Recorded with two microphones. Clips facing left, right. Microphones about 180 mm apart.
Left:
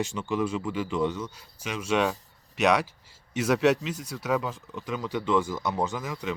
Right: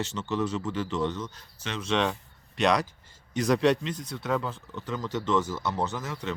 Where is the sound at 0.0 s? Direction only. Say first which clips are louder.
Left 1 dB; 10° left (ahead or behind).